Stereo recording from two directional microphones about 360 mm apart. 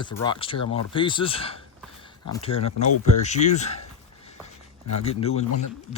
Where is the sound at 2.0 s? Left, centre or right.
Centre.